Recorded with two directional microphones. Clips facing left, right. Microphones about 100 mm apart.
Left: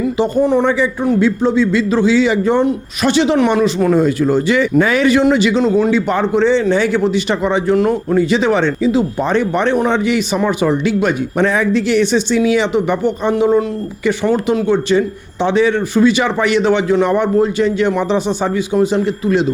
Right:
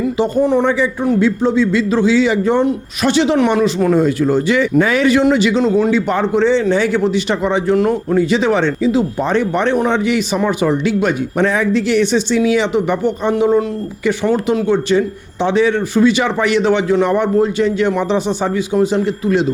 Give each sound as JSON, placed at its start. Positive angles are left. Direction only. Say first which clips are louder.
{"t": 0.3, "sound": "a man's voice", "louder": "left 1 dB", "side_deg": 30}